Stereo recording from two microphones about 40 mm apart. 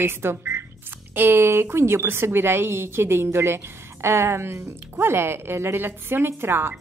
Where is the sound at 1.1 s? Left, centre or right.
Right.